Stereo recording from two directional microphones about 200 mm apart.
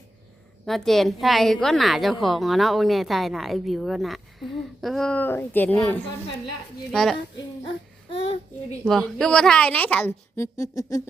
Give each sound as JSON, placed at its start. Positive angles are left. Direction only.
{"t": 0.6, "sound": "a woman's voice", "side_deg": 0}
{"t": 8.1, "sound": "a child's voice", "side_deg": 30}
{"t": 8.8, "sound": "a woman's voice", "side_deg": 0}